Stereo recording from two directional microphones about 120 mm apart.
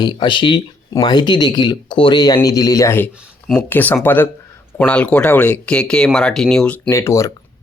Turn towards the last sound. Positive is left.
turn(degrees=25)  # may be behind; listen again after turning